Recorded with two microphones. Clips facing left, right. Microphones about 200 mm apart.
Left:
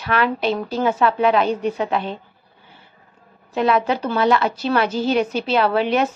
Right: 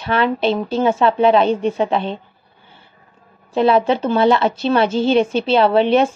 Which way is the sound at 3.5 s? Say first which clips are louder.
Right 4 dB; 30° right (ahead or behind).